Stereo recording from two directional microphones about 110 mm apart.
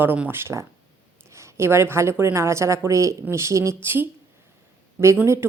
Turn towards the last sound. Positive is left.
turn(degrees=-25)  # may be behind; listen again after turning